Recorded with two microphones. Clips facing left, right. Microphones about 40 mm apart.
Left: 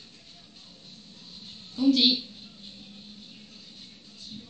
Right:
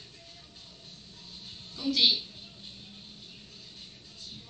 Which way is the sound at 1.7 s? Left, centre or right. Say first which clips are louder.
Left 5 dB; left.